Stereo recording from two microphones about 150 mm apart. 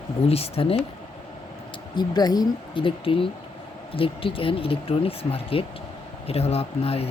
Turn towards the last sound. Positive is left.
turn(degrees=40)  # may be behind; listen again after turning